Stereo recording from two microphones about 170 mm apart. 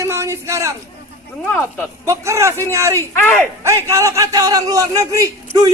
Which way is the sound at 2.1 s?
15° right (ahead or behind).